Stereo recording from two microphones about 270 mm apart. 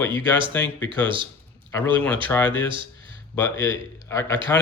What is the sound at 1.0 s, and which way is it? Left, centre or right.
Speech, centre.